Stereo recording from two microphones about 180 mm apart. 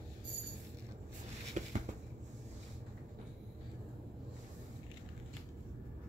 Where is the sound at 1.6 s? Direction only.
45° right (ahead or behind).